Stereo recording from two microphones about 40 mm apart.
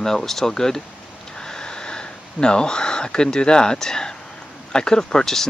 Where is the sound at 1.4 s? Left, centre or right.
Centre.